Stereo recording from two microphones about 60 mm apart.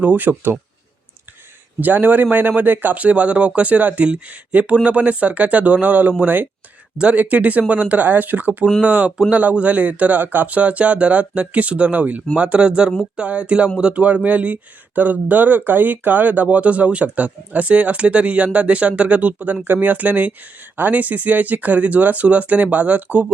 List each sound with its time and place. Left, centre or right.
0.0 s a man's voice: right
1.8 s a man's voice: right